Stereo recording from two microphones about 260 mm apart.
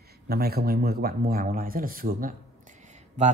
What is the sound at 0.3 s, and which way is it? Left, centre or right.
Speech, right.